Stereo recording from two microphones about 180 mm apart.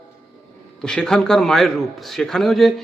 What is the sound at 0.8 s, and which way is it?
A man's voice, 5° left (ahead or behind).